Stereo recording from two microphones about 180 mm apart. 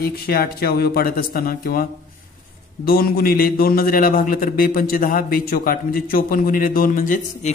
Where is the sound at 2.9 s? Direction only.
55° left (ahead or behind).